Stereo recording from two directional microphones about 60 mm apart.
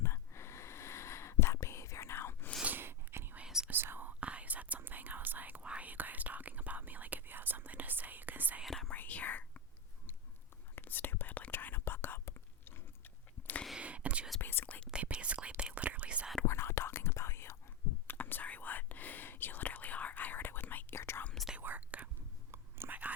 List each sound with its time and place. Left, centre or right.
0.0 s whispering: left
2.6 s whispering: right
3.4 s whispering: centre
3.7 s whispering: right
8.6 s whispering: centre
8.9 s whispering: left
10.8 s whispering: left
13.7 s whispering: right
14.4 s whispering: left
14.8 s whispering: centre
16.5 s whispering: left
18.1 s whispering: left
21.6 s whispering: right